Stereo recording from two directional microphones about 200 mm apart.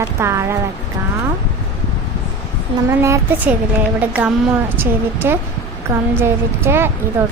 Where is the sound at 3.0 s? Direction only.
10° right (ahead or behind).